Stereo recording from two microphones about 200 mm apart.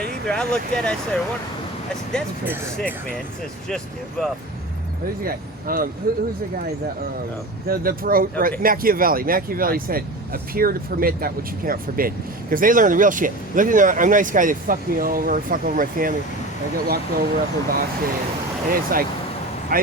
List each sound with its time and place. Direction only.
0.3 s speech: 5° left (ahead or behind)
2.7 s speech: 5° left (ahead or behind)
5.2 s speech: 45° right (ahead or behind)
7.7 s speech: 45° right (ahead or behind)